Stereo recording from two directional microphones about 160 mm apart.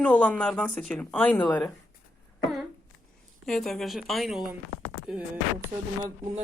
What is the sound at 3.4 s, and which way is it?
Speech, centre (ahead or behind).